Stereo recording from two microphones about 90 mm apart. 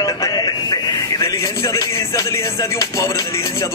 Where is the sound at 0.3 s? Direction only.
50° left (ahead or behind).